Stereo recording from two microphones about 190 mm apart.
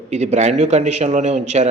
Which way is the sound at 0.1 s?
35° right (ahead or behind).